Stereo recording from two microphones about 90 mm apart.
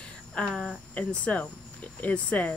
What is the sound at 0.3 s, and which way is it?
Speech, 10° left (ahead or behind).